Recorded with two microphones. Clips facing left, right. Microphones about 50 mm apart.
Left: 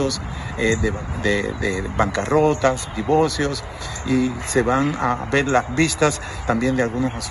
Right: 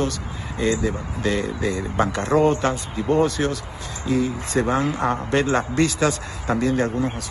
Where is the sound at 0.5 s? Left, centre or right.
Left.